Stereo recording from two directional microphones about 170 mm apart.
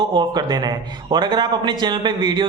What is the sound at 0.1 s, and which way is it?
A man's voice, 25° right (ahead or behind).